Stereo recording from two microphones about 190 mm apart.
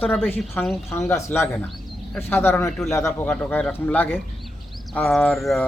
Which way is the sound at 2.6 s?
Centre (ahead or behind).